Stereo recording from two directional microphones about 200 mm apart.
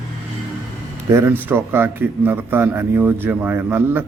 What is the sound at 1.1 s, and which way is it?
A man's voice, 10° right (ahead or behind).